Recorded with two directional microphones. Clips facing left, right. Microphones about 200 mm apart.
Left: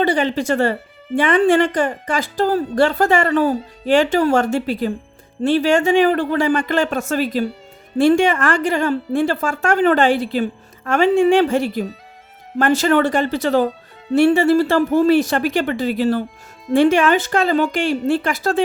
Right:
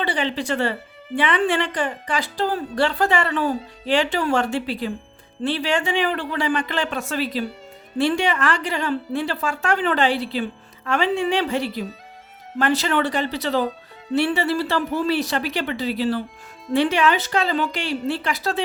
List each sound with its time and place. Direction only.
0.0 s speech: 45° left (ahead or behind)